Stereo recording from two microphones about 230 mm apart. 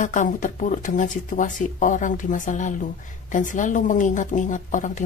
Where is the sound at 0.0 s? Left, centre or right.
Left.